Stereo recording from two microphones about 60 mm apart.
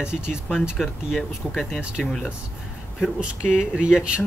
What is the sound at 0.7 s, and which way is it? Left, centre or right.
Speech, centre.